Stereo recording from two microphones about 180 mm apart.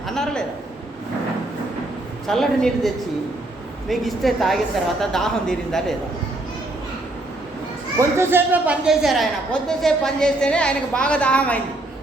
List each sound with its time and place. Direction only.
0.1 s a sound: 5° left (ahead or behind)
2.2 s a woman's voice: centre (ahead or behind)
7.9 s a woman's voice: 15° right (ahead or behind); by 11.6 s 5° left (ahead or behind)